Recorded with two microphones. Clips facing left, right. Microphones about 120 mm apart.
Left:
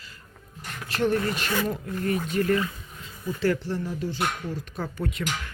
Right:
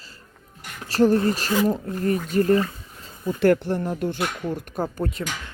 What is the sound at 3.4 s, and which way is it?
Speech, 55° right (ahead or behind).